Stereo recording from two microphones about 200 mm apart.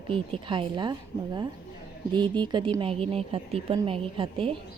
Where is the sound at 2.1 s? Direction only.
20° right (ahead or behind).